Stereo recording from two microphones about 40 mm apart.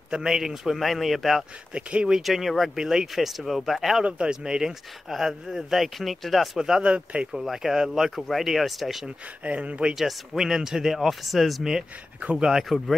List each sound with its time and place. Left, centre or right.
0.1 s speech: centre
0.7 s a man's voice: centre
1.7 s speech: right
2.2 s a man's voice: centre
2.7 s speech: centre
3.2 s a man's voice: centre
4.0 s speech: right
5.1 s a man's voice: centre
6.8 s speech: right
7.3 s a man's voice: centre
9.4 s speech: right
9.9 s speech: centre
12.4 s speech: centre
12.6 s a man's voice: centre